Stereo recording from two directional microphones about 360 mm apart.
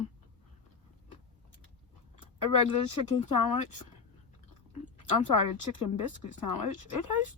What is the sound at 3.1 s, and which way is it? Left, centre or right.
Speech, left.